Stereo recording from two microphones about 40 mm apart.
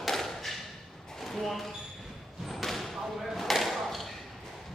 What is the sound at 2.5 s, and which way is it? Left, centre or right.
Slam, centre.